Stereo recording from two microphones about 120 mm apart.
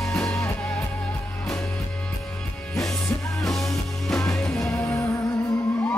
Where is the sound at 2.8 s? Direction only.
5° left (ahead or behind).